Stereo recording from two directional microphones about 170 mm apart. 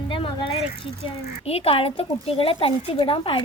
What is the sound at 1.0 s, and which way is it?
Speech, 35° left (ahead or behind).